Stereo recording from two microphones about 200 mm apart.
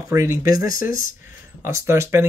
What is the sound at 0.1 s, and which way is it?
Speech, 15° right (ahead or behind).